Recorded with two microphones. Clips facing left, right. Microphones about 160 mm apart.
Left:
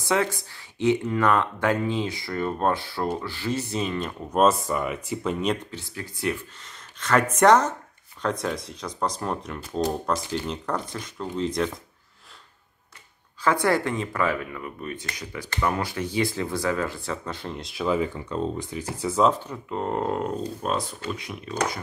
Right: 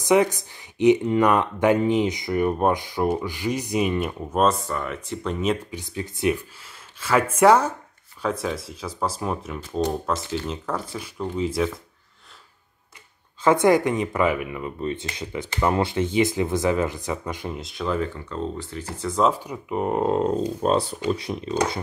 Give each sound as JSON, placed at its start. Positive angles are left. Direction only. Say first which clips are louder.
{"t": 0.0, "sound": "speech", "louder": "right 6 dB", "side_deg": -15}
{"t": 4.4, "sound": "speech", "louder": "left 1 dB", "side_deg": 10}
{"t": 5.7, "sound": "speech", "louder": "right 5 dB", "side_deg": -15}
{"t": 13.4, "sound": "speech", "louder": "right 5 dB", "side_deg": -20}
{"t": 17.6, "sound": "speech", "louder": "left 3 dB", "side_deg": 0}
{"t": 19.2, "sound": "speech", "louder": "right 1 dB", "side_deg": -10}